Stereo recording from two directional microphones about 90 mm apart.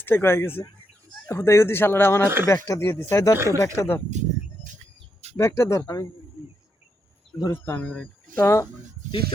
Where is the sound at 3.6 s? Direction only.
25° left (ahead or behind).